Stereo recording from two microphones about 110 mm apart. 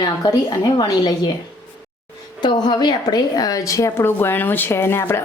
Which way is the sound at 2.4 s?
40° left (ahead or behind).